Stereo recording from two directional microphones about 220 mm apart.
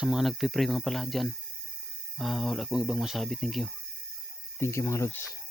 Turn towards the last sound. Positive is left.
turn(degrees=10)  # may be behind; listen again after turning